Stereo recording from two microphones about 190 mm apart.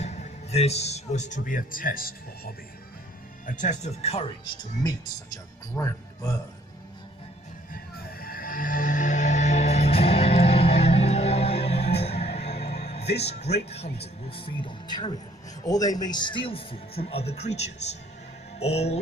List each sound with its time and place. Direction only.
0.0 s speech: 35° left (ahead or behind)
5.7 s speech: 15° left (ahead or behind)
8.2 s music: 50° left (ahead or behind); by 12.5 s 35° left (ahead or behind)
13.0 s music: 60° left (ahead or behind)
13.2 s speech: 35° left (ahead or behind)